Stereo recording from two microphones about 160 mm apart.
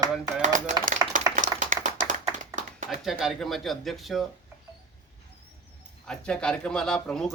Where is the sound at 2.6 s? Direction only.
50° right (ahead or behind).